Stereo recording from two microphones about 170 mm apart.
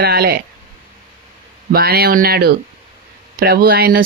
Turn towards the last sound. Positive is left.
turn(degrees=-60)  # may be behind; listen again after turning